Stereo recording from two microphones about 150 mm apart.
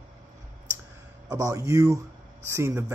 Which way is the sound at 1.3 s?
20° right (ahead or behind).